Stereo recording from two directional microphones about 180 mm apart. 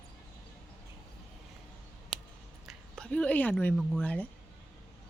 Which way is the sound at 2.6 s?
5° left (ahead or behind).